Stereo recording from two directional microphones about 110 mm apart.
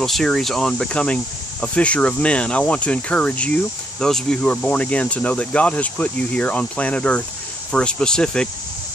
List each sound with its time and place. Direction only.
0.0 s speech: 5° left (ahead or behind)